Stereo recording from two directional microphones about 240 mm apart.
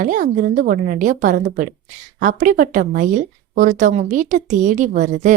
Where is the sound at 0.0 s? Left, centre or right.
Right.